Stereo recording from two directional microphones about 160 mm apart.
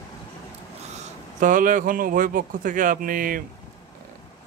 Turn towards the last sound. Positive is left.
turn(degrees=-60)  # may be behind; listen again after turning